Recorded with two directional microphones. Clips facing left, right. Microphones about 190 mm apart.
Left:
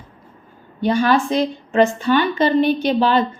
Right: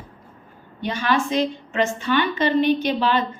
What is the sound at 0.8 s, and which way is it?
Speech, 35° left (ahead or behind).